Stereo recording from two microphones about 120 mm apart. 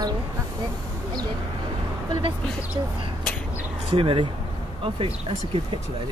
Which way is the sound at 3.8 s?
50° right (ahead or behind).